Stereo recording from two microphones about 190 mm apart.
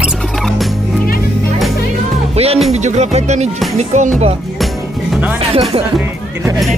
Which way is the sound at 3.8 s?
35° right (ahead or behind).